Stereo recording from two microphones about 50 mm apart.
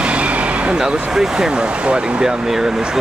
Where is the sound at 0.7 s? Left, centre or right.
Centre.